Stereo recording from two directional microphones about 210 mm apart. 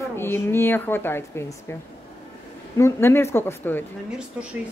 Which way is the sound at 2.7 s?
15° left (ahead or behind).